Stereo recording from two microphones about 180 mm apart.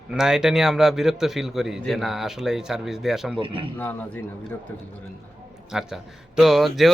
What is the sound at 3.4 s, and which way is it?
Speech, 30° right (ahead or behind).